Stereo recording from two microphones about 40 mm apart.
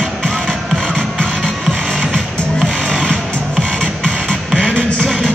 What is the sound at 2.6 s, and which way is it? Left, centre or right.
Music, right.